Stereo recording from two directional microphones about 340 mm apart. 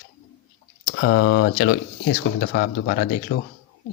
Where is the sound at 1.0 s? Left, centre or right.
Left.